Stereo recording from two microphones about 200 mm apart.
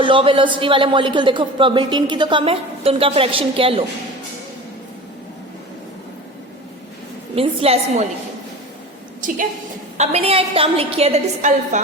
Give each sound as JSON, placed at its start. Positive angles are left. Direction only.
{"t": 0.0, "sound": "speech", "side_deg": -25}
{"t": 7.3, "sound": "speech", "side_deg": -30}
{"t": 10.0, "sound": "a woman's voice", "side_deg": -30}